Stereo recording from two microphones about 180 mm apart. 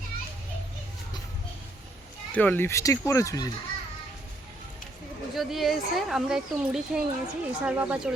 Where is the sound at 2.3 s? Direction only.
10° left (ahead or behind).